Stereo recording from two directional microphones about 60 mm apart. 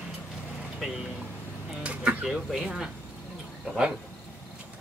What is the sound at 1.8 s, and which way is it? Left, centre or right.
Speech, centre.